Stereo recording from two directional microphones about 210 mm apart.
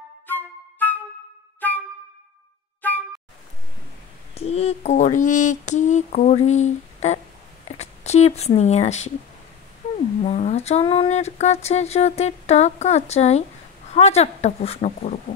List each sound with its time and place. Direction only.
0.3 s flute: 10° left (ahead or behind)
1.6 s music: 10° left (ahead or behind)
2.8 s music: 10° left (ahead or behind)
4.4 s a sound: 30° left (ahead or behind)
7.6 s speech: 30° left (ahead or behind)
10.2 s a sound: 30° left (ahead or behind)